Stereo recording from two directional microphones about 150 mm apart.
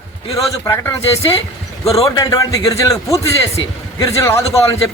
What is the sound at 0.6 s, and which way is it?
A man's voice, 15° left (ahead or behind).